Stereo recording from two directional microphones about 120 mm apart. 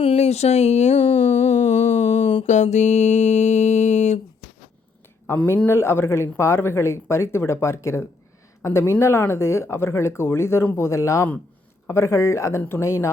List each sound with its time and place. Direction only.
0.0 s speech: 60° left (ahead or behind)
1.0 s a sound: 55° left (ahead or behind)
2.5 s mantra: 75° left (ahead or behind)
5.3 s speech: 15° left (ahead or behind)